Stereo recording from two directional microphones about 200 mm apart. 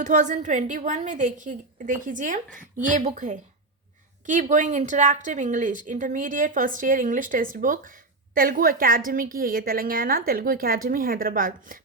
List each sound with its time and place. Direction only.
0.0 s a woman's voice: 40° right (ahead or behind)